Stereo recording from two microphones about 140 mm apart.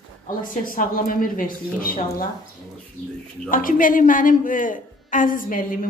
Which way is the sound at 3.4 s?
75° left (ahead or behind).